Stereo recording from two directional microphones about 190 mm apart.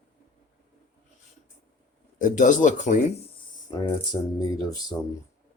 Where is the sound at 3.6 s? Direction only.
20° left (ahead or behind).